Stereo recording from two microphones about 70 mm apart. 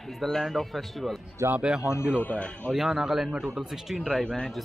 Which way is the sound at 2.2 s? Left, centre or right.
Centre.